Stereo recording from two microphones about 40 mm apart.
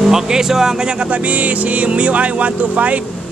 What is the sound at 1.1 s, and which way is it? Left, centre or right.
Speech, right.